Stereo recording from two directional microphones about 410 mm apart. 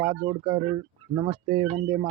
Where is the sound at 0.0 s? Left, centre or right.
Centre.